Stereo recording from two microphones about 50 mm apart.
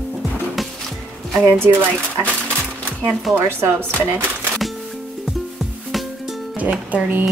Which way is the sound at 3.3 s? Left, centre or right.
Right.